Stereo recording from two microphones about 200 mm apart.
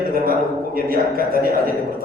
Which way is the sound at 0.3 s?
45° right (ahead or behind).